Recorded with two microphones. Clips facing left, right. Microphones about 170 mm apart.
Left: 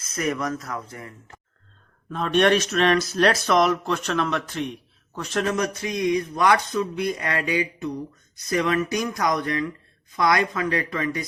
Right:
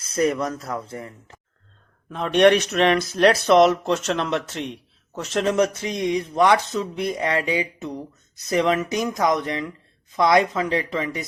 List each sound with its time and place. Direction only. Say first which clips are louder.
0.1 s speech: right 4 dB; 30° right (ahead or behind)